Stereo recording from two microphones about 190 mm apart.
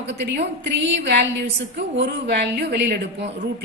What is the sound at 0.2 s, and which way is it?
A woman's voice, 65° right (ahead or behind).